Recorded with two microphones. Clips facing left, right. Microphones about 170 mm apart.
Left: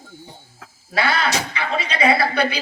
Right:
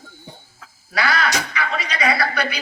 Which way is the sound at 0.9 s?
30° left (ahead or behind).